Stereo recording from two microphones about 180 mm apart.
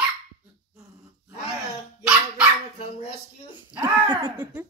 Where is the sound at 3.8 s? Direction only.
25° right (ahead or behind).